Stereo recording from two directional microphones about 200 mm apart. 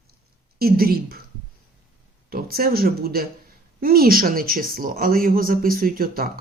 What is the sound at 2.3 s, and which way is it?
Speech, 50° right (ahead or behind).